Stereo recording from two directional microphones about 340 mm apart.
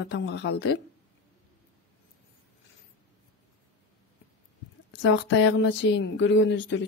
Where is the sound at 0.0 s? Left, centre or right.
Left.